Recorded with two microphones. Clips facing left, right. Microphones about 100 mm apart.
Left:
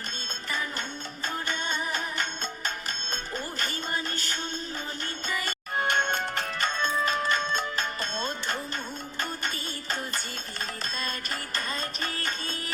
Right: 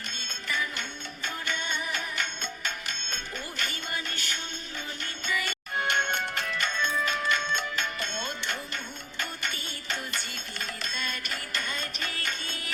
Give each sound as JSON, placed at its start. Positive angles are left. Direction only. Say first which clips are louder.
{"t": 0.4, "sound": "music", "louder": "even", "side_deg": 35}